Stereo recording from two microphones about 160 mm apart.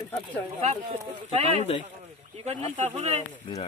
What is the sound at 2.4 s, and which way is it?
Speech, 45° right (ahead or behind).